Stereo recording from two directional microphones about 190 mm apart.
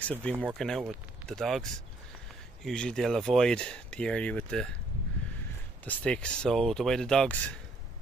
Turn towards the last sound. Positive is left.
turn(degrees=5)  # may be behind; listen again after turning